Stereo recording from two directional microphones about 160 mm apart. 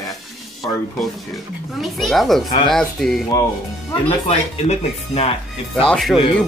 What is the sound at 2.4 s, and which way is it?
Speech, 25° left (ahead or behind).